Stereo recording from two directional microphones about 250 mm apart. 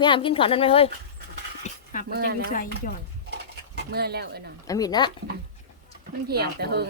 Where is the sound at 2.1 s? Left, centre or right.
Right.